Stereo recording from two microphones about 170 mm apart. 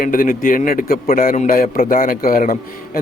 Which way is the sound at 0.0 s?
55° left (ahead or behind).